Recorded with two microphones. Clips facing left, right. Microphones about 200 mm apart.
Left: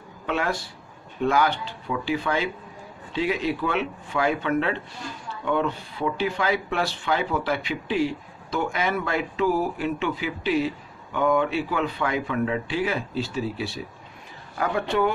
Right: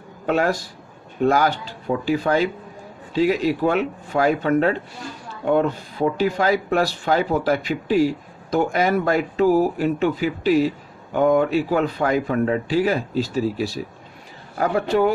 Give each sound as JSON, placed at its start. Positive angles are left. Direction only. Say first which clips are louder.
{"t": 0.3, "sound": "speech", "louder": "right 6 dB", "side_deg": -40}